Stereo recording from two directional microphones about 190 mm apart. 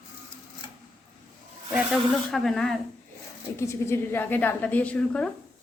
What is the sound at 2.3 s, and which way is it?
Speech, centre (ahead or behind).